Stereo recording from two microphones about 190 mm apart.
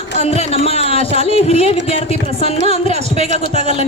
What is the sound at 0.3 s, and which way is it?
A woman's voice, 30° left (ahead or behind).